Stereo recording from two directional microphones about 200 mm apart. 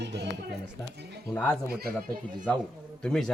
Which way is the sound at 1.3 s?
10° left (ahead or behind).